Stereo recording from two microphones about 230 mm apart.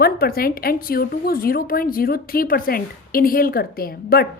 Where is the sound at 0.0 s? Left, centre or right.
Left.